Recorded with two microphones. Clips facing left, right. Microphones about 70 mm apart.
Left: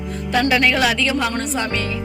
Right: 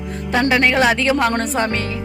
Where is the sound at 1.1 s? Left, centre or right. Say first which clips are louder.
Right 4 dB; right.